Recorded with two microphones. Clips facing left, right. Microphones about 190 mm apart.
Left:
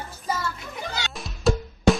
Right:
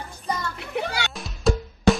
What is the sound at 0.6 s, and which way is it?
Children playing, 65° right (ahead or behind).